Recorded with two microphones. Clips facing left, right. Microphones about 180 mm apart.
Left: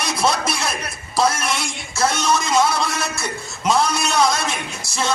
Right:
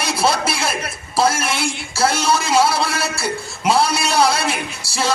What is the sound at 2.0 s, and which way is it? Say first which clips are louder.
Speech: right 2 dB; 30° right (ahead or behind).